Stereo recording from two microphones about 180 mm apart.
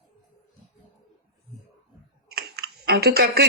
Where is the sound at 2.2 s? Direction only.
60° right (ahead or behind).